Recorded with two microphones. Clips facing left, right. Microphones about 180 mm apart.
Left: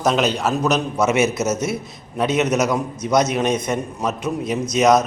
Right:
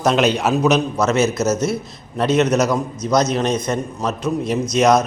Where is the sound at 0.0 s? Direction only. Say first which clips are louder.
Right 2 dB; centre (ahead or behind).